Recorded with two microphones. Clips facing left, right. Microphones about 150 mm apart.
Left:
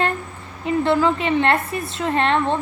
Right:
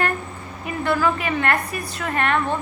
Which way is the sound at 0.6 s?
25° left (ahead or behind).